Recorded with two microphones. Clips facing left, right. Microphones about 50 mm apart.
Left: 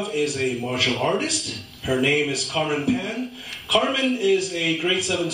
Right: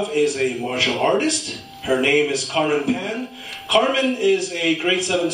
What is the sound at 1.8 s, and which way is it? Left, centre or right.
A man's voice, right.